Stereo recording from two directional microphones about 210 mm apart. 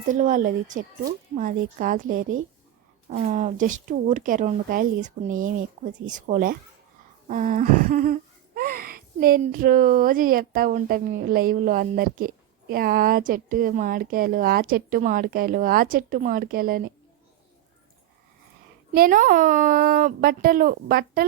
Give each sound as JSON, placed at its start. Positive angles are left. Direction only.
{"t": 0.1, "sound": "speech", "side_deg": -40}
{"t": 7.3, "sound": "a sound", "side_deg": -40}
{"t": 18.9, "sound": "speech", "side_deg": -40}